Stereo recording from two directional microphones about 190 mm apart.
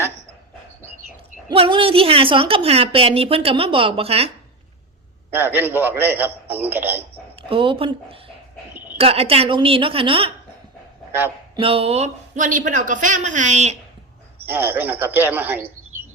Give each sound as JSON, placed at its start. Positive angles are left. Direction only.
{"t": 1.5, "sound": "a woman's voice", "side_deg": -25}
{"t": 5.3, "sound": "a man's voice", "side_deg": -10}
{"t": 7.4, "sound": "a woman's voice", "side_deg": -25}
{"t": 11.5, "sound": "speech", "side_deg": -30}
{"t": 14.5, "sound": "a man's voice", "side_deg": -10}